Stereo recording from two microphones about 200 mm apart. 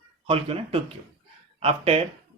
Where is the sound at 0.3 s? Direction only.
30° right (ahead or behind).